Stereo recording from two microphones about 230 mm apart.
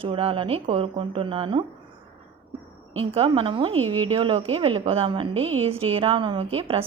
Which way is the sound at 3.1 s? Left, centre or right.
Right.